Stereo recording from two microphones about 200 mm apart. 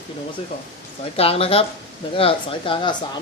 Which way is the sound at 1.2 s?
30° left (ahead or behind).